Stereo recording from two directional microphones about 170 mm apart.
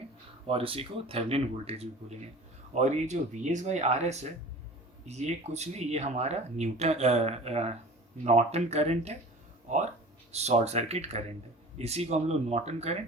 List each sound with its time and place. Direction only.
0.4 s speech: 35° right (ahead or behind)